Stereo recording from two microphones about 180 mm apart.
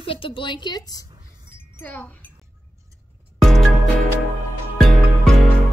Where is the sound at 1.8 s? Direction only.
10° left (ahead or behind).